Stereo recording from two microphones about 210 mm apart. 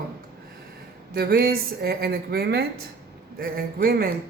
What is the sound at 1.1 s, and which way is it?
Speech, 45° right (ahead or behind).